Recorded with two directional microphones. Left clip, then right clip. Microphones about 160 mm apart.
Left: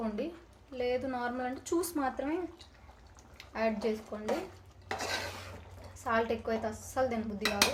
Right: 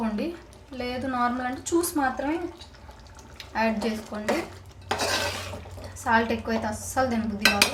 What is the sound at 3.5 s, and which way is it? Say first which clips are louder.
Speech: right 6 dB; 35° left (ahead or behind).